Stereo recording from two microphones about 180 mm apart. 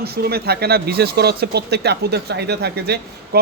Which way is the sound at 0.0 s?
60° right (ahead or behind).